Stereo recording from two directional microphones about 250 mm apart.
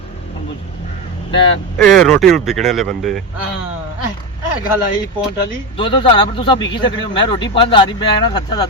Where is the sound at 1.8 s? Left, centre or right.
Centre.